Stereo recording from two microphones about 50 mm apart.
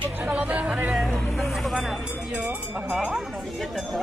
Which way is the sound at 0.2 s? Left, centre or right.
Right.